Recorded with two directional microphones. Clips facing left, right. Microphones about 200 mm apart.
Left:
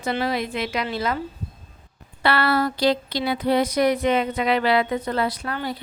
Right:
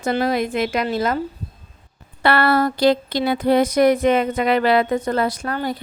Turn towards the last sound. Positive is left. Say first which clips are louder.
# right 4 dB
turn(degrees=-45)  # may be behind; listen again after turning